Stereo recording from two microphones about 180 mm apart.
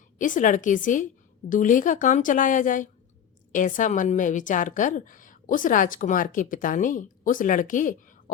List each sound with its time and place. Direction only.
0.2 s a woman's voice: 45° left (ahead or behind)